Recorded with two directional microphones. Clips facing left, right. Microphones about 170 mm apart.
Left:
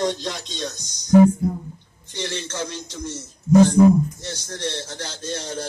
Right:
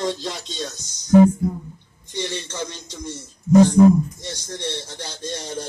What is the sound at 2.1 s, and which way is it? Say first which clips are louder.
Speech: even; 15° right (ahead or behind).